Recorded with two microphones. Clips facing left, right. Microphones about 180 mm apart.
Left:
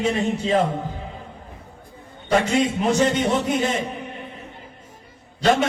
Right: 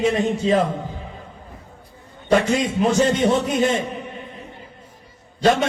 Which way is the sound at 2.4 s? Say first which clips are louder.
Even; 25° left (ahead or behind).